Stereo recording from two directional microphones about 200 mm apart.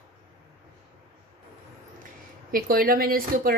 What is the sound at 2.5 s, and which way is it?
Speech, 45° right (ahead or behind).